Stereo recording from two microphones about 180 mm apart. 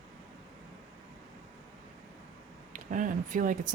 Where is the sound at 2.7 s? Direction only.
45° right (ahead or behind).